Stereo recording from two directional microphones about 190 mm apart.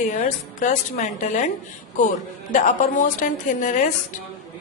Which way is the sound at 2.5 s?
45° left (ahead or behind).